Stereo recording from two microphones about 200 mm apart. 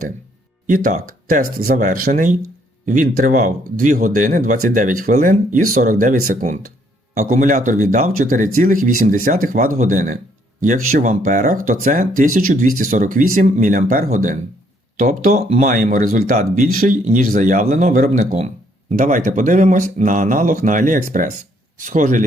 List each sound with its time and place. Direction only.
0.7 s speech: 40° right (ahead or behind)